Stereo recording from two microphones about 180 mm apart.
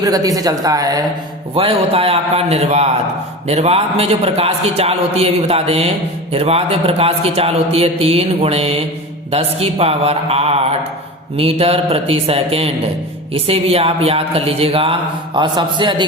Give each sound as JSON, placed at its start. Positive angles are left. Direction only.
{"t": 0.0, "sound": "speech", "side_deg": -20}
{"t": 1.5, "sound": "a man's voice", "side_deg": -30}